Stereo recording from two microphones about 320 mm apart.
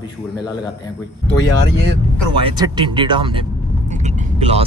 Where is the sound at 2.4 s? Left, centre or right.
Centre.